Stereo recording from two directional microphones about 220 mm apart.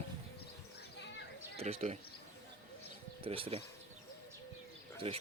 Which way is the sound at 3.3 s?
25° right (ahead or behind).